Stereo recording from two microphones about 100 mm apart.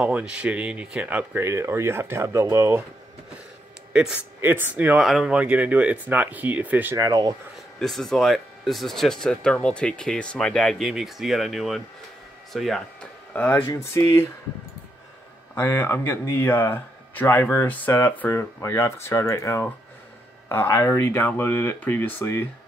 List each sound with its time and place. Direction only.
0.0 s speech: 10° right (ahead or behind)
1.4 s speech: 25° right (ahead or behind)
3.9 s speech: 10° right (ahead or behind)
5.0 s speech: 5° right (ahead or behind)
7.0 s speech: 40° right (ahead or behind)
7.8 s speech: centre (ahead or behind)
13.3 s speech: 20° left (ahead or behind)
15.5 s speech: 25° left (ahead or behind)